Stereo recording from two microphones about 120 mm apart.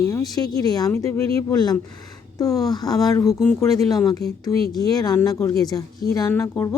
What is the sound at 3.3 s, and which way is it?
Speech, 5° right (ahead or behind).